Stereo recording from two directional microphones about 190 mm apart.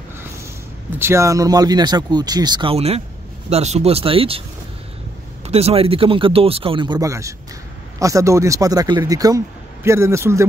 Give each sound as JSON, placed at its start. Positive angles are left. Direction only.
{"t": 0.9, "sound": "speech", "side_deg": -15}
{"t": 5.5, "sound": "a man's voice", "side_deg": -35}